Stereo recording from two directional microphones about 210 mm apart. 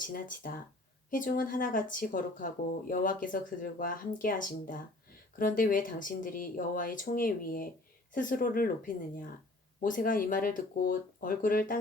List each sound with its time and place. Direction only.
0.0 s speech: 40° left (ahead or behind)